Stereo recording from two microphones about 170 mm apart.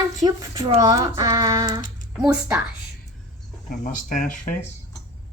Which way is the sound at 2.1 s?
5° right (ahead or behind).